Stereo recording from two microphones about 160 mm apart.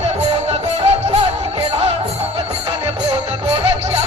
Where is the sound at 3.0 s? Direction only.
30° right (ahead or behind).